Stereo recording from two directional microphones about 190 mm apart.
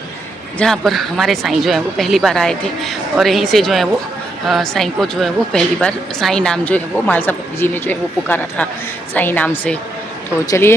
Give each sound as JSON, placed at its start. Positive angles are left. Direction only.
{"t": 0.6, "sound": "a woman's voice", "side_deg": 0}